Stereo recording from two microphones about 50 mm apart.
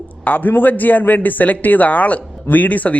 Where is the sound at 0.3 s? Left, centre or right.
Left.